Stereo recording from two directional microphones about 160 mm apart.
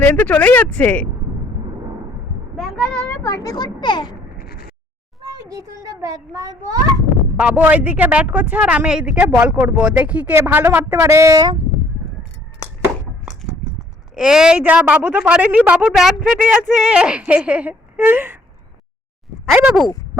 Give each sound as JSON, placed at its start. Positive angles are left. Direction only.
{"t": 0.0, "sound": "speech", "side_deg": 10}
{"t": 2.6, "sound": "a sound", "side_deg": 5}
{"t": 4.4, "sound": "a sound", "side_deg": 70}
{"t": 5.5, "sound": "a child's voice", "side_deg": -20}
{"t": 7.3, "sound": "speech", "side_deg": -10}
{"t": 14.2, "sound": "speech", "side_deg": -5}
{"t": 19.5, "sound": "speech", "side_deg": -5}